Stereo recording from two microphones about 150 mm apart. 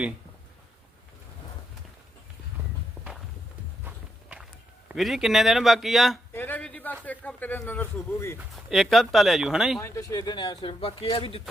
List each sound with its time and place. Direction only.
3.8 s walk: 10° right (ahead or behind)
4.9 s speech: centre (ahead or behind)
6.3 s a sound: 10° left (ahead or behind)
7.0 s speech: 10° left (ahead or behind)
8.4 s speech: centre (ahead or behind)
9.8 s speech: 20° left (ahead or behind); by 11.4 s 40° left (ahead or behind)